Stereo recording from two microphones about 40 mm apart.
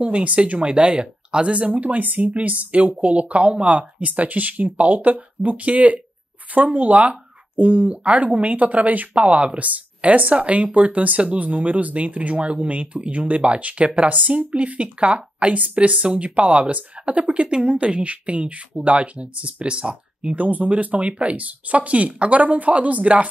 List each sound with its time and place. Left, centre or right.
0.0 s speech: right
3.7 s speech: right
20.3 s speech: right